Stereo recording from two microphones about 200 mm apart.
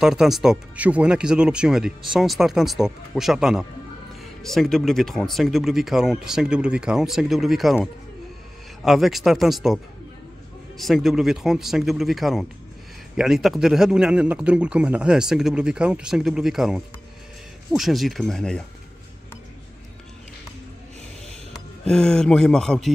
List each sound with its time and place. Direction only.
0.0 s a man's voice: centre (ahead or behind)
10.8 s a man's voice: centre (ahead or behind)
21.8 s a man's voice: 5° left (ahead or behind)